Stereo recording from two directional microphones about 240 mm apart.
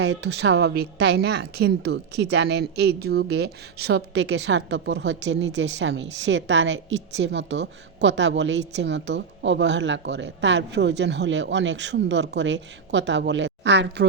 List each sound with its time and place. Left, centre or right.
0.0 s a woman's voice: right